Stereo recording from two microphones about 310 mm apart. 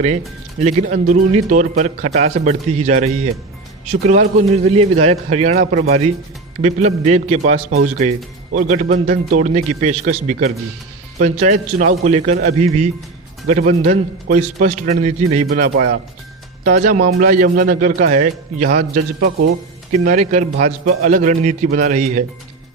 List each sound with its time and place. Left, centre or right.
0.6 s a man's voice: right